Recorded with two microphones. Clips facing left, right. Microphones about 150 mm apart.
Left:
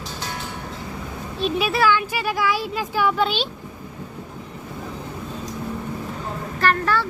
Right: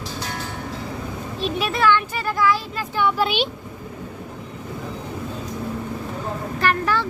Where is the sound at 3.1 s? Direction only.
10° right (ahead or behind).